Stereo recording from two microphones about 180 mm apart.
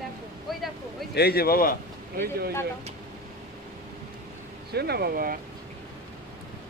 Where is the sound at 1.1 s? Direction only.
60° left (ahead or behind).